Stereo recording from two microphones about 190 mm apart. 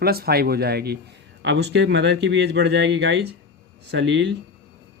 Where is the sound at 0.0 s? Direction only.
55° right (ahead or behind).